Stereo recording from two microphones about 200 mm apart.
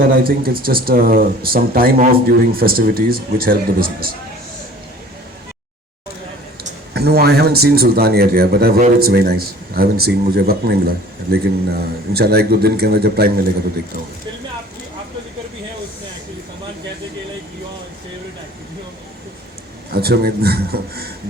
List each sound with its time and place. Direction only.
0.0 s speech: 45° right (ahead or behind)
6.9 s speech: 50° right (ahead or behind)
19.9 s speech: 50° right (ahead or behind)